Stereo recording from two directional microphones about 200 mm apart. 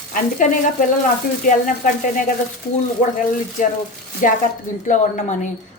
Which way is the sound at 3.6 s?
40° left (ahead or behind).